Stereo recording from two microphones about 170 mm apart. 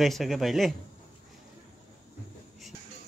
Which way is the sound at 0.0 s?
Centre (ahead or behind).